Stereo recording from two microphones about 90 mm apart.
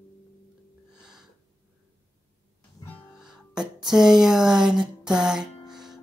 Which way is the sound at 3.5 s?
5° right (ahead or behind).